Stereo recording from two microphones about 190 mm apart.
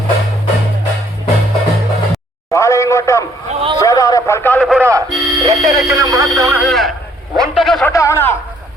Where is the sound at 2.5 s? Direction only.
15° left (ahead or behind); by 4.8 s centre (ahead or behind).